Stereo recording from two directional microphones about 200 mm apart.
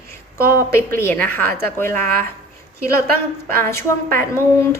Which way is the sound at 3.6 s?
10° left (ahead or behind).